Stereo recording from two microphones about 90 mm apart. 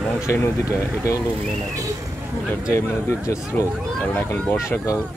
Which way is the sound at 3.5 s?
20° left (ahead or behind).